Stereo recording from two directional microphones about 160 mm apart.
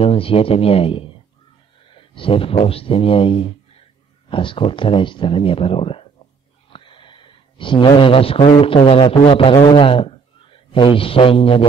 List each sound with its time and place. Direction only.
0.0 s speech: 35° left (ahead or behind)